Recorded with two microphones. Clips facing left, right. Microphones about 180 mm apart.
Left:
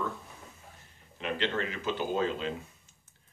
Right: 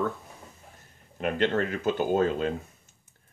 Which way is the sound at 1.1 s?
50° right (ahead or behind).